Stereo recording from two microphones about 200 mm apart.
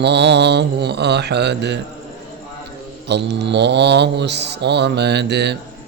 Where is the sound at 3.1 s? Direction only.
60° right (ahead or behind).